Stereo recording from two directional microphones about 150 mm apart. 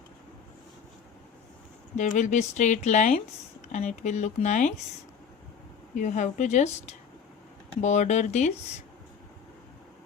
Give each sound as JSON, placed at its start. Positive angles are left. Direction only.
{"t": 2.0, "sound": "a woman's voice", "side_deg": 55}
{"t": 5.9, "sound": "a woman's voice", "side_deg": 55}